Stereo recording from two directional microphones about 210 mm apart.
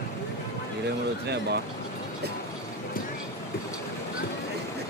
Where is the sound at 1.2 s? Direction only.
50° right (ahead or behind).